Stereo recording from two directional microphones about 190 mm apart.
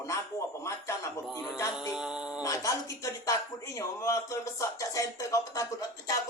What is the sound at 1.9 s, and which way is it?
Speech, 5° right (ahead or behind).